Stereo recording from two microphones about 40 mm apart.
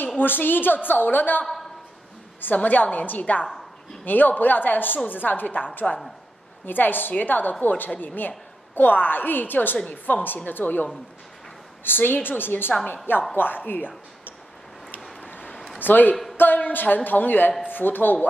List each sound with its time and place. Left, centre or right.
0.2 s a woman's voice: left
2.4 s a woman's voice: left
15.2 s a sound: left
15.8 s a woman's voice: left